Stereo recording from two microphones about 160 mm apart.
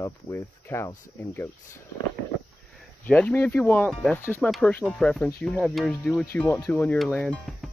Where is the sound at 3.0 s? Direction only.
10° left (ahead or behind).